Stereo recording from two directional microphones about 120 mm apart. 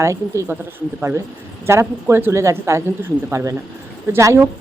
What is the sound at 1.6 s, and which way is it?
Speech, 20° right (ahead or behind).